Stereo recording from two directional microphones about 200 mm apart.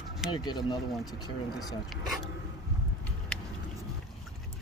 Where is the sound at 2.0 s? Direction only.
Centre (ahead or behind).